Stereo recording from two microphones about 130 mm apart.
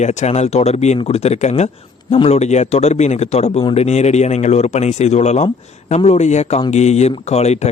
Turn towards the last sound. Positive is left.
turn(degrees=60)  # may be behind; listen again after turning